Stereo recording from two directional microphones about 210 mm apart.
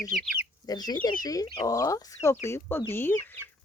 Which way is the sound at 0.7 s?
20° left (ahead or behind).